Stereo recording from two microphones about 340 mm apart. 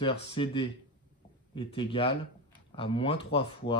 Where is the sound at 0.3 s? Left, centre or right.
Centre.